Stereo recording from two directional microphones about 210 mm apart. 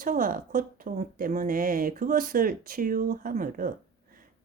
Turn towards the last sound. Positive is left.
turn(degrees=-40)  # may be behind; listen again after turning